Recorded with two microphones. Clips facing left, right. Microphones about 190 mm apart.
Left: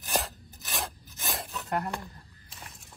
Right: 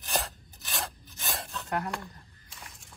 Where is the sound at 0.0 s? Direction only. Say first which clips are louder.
Left 1 dB; centre (ahead or behind).